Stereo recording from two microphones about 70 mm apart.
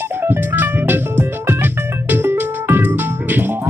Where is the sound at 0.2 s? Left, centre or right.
Right.